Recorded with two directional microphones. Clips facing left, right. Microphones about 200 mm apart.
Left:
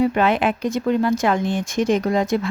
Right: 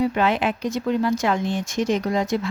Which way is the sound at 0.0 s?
55° left (ahead or behind).